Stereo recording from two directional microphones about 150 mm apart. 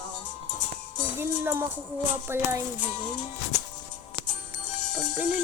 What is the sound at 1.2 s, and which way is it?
Speech, 15° right (ahead or behind).